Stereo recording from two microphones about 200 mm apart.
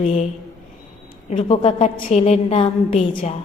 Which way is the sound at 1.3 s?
30° left (ahead or behind).